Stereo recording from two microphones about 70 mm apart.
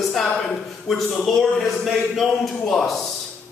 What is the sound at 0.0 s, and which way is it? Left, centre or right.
A man's voice, centre.